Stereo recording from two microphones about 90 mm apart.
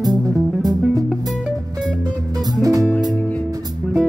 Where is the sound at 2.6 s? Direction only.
40° right (ahead or behind).